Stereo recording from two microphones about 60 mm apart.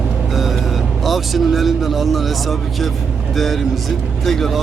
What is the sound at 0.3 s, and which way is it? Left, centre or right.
Speech, centre.